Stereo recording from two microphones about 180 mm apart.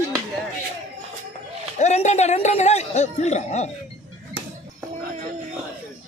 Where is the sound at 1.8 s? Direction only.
40° left (ahead or behind).